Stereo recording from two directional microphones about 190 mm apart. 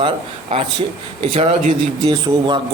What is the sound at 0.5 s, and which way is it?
A man's voice, 30° right (ahead or behind).